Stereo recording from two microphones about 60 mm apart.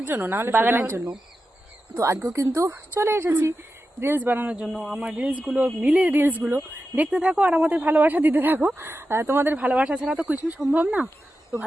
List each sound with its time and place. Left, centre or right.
0.0 s speech: right
2.2 s speech: right
2.9 s speech: right
4.8 s speech: centre
5.0 s speech: right
7.1 s speech: centre
7.4 s speech: right
9.6 s speech: right
10.2 s speech: right